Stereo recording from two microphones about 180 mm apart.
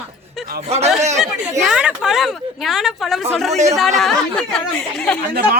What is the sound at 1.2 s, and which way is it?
Speech, 5° right (ahead or behind).